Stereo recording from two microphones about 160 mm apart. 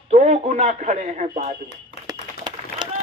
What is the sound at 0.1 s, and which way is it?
Speech, 45° right (ahead or behind).